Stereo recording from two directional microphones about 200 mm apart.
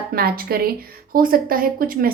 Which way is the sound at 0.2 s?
50° right (ahead or behind).